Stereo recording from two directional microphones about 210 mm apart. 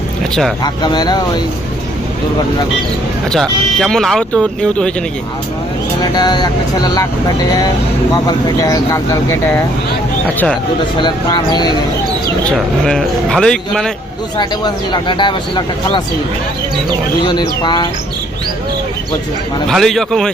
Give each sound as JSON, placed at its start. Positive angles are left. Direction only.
{"t": 0.6, "sound": "speech", "side_deg": 20}
{"t": 3.3, "sound": "speech", "side_deg": 0}
{"t": 6.1, "sound": "speech", "side_deg": 20}
{"t": 8.1, "sound": "speech", "side_deg": 15}
{"t": 10.9, "sound": "speech", "side_deg": 20}
{"t": 12.5, "sound": "speech", "side_deg": 5}
{"t": 14.3, "sound": "speech", "side_deg": 20}
{"t": 17.2, "sound": "speech", "side_deg": 20}
{"t": 19.6, "sound": "speech", "side_deg": 0}